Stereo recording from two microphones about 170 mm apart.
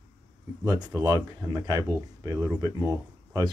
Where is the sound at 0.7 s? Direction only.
25° right (ahead or behind).